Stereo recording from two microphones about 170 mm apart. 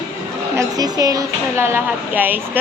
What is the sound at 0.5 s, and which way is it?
Speech, 20° right (ahead or behind).